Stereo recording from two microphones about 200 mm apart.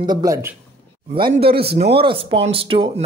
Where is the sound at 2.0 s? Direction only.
25° right (ahead or behind).